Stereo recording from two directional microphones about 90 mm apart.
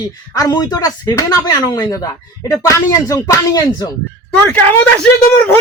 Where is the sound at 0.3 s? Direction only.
45° left (ahead or behind).